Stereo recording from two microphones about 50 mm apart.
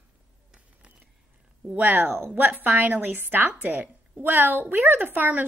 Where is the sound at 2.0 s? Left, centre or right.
Right.